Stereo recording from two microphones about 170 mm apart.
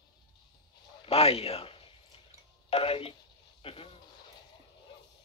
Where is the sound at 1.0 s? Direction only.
35° left (ahead or behind).